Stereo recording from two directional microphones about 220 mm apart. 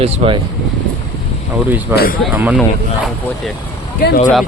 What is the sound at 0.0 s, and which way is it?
Speech, 30° right (ahead or behind).